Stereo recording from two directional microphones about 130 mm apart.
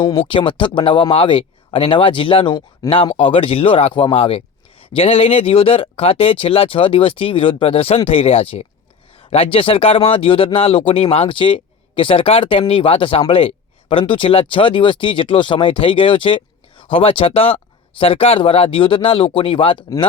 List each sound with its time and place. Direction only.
0.0 s speech: 35° left (ahead or behind)